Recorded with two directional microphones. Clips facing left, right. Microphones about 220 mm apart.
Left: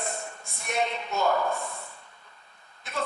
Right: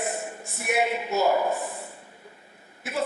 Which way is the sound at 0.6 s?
5° right (ahead or behind).